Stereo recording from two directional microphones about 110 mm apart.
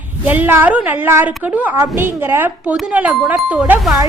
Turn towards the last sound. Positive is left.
turn(degrees=-15)  # may be behind; listen again after turning